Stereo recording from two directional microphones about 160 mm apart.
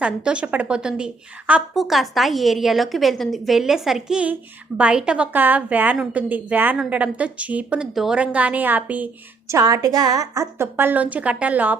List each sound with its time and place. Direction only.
0.0 s a woman's voice: 5° right (ahead or behind)
9.5 s a woman's voice: 20° right (ahead or behind)